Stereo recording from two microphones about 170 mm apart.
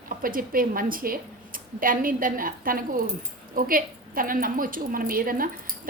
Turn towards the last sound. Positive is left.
turn(degrees=-55)  # may be behind; listen again after turning